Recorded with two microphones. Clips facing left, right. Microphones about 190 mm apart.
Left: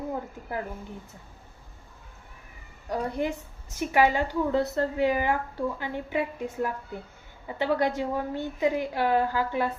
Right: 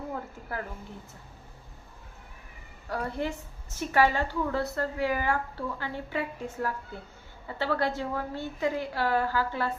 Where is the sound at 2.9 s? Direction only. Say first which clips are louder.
Left 3 dB; 15° left (ahead or behind).